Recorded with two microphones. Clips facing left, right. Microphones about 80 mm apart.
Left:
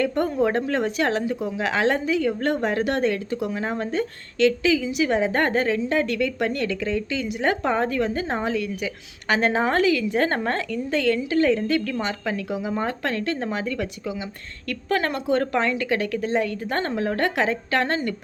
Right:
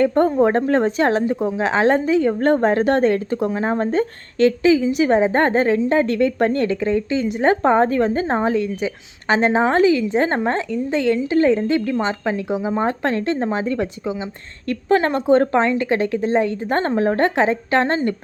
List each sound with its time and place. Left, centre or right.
0.0 s a woman's voice: right